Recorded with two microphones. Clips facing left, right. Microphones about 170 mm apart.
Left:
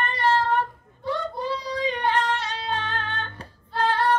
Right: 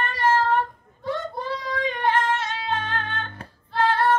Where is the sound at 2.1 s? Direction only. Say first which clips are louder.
Right 5 dB; 50° right (ahead or behind).